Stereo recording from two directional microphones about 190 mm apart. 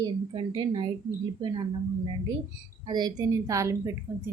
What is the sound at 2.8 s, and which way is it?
A woman's voice, 20° right (ahead or behind).